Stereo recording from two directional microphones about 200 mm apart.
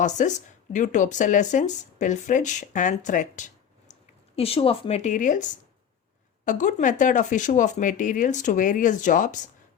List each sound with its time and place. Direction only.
0.0 s speech: 35° left (ahead or behind)